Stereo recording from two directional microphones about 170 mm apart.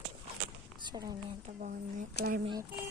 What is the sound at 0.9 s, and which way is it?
Speech, 20° right (ahead or behind).